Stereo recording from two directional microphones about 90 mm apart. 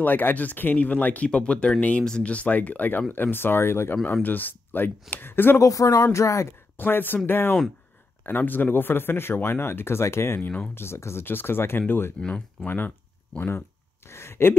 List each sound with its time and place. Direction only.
0.0 s speech: 20° left (ahead or behind)
5.6 s speech: 40° left (ahead or behind)
6.8 s speech: 20° left (ahead or behind)